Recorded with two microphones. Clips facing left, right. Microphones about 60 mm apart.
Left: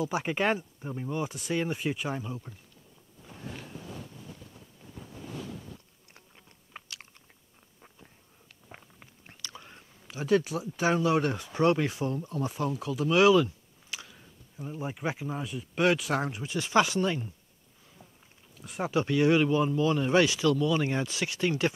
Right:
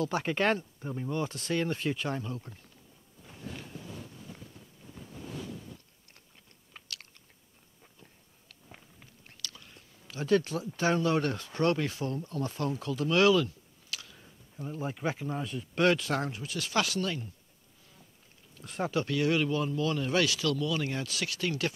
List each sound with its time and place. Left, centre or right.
0.0 s speech: centre
6.7 s chewing: centre
7.8 s biting: centre
10.1 s speech: centre
14.1 s speech: centre
18.6 s speech: centre